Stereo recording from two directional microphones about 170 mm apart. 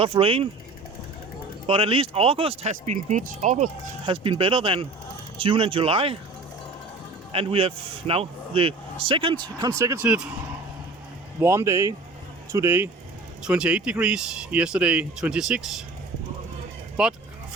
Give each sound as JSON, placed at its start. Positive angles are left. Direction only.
{"t": 0.0, "sound": "speech", "side_deg": -30}
{"t": 1.6, "sound": "speech", "side_deg": -35}
{"t": 4.0, "sound": "speech", "side_deg": -30}
{"t": 7.3, "sound": "speech", "side_deg": -35}
{"t": 11.3, "sound": "speech", "side_deg": -15}
{"t": 17.0, "sound": "speech", "side_deg": -5}